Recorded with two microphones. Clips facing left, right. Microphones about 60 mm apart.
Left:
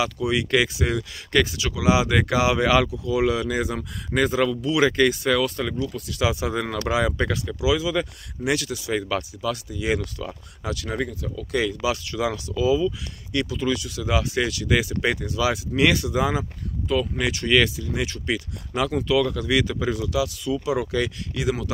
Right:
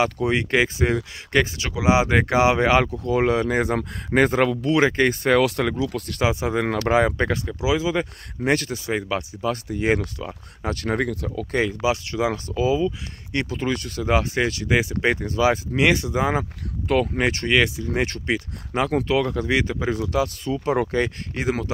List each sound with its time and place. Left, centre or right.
0.0 s speech: right
4.8 s speech: right
5.4 s speech: right
6.2 s speech: right
9.7 s speech: right
10.1 s speech: right
10.7 s speech: right
11.5 s speech: right
16.8 s speech: right
17.2 s speech: right
17.5 s speech: right
17.8 s speech: right
18.2 s speech: right